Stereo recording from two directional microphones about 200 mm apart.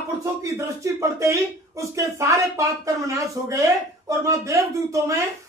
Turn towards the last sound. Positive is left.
turn(degrees=-15)  # may be behind; listen again after turning